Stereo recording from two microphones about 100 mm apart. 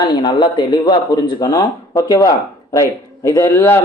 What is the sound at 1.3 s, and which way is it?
Speech, 35° left (ahead or behind).